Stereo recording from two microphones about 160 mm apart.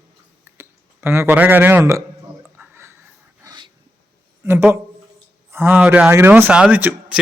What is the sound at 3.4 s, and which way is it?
Dog, 25° right (ahead or behind).